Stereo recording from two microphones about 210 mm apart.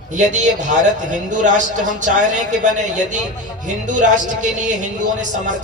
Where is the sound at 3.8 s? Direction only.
35° right (ahead or behind).